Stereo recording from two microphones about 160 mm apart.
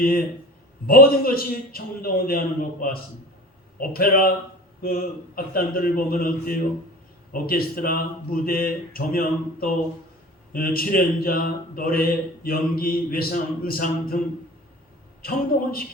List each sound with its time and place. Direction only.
0.0 s a man's voice: 65° left (ahead or behind)
15.2 s a man's voice: 65° left (ahead or behind)